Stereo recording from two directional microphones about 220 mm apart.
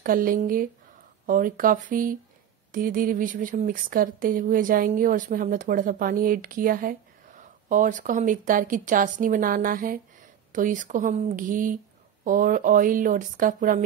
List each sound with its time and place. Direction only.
0.0 s speech: 40° right (ahead or behind)